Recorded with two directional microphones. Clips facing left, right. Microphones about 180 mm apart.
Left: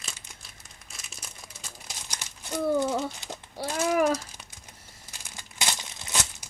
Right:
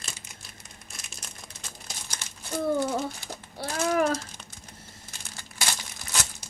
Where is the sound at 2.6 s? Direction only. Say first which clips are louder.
Left 1 dB; 20° left (ahead or behind).